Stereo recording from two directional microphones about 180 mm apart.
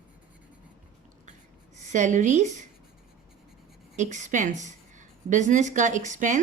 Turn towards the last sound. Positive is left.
turn(degrees=-45)  # may be behind; listen again after turning